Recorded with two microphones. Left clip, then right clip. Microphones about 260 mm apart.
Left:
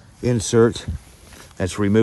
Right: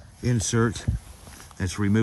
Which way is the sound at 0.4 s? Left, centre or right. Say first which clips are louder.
Left 10 dB; centre.